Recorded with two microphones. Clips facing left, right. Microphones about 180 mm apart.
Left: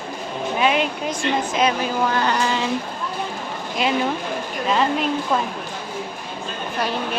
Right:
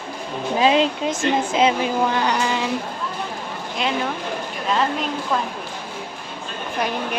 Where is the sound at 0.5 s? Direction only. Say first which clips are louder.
Right 3 dB; 30° right (ahead or behind).